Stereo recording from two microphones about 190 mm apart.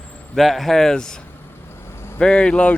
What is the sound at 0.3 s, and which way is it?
Speech, centre (ahead or behind).